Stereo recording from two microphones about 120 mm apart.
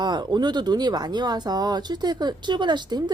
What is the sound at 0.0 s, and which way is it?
A woman's voice, 35° right (ahead or behind).